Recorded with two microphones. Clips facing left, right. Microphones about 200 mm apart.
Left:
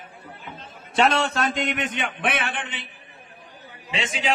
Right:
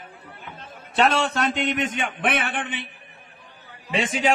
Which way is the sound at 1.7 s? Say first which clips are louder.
Right 2 dB; 40° right (ahead or behind).